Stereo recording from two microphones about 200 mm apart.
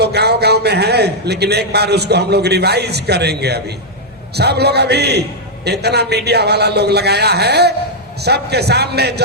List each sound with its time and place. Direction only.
0.0 s a man's voice: 55° right (ahead or behind)